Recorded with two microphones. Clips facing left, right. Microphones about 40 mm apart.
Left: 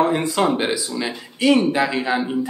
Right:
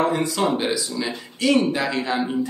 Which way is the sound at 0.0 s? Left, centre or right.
Left.